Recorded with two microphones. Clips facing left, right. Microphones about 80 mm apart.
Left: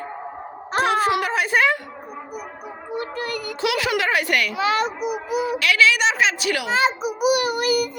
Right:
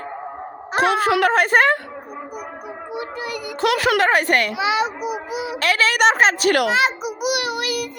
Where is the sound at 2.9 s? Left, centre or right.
Centre.